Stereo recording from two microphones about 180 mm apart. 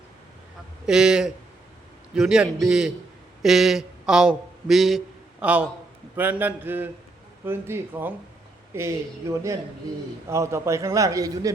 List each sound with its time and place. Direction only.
0.9 s a man's voice: 5° right (ahead or behind)
10.2 s a man's voice: 15° right (ahead or behind)